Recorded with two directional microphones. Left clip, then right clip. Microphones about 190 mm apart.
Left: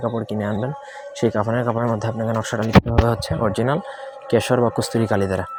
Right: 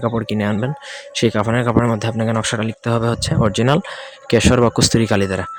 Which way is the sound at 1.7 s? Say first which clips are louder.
Right 4 dB; 40° right (ahead or behind).